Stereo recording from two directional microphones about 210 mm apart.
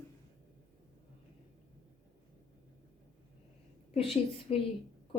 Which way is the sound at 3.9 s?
30° left (ahead or behind).